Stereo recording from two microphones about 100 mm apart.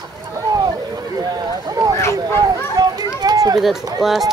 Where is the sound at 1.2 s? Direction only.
40° right (ahead or behind).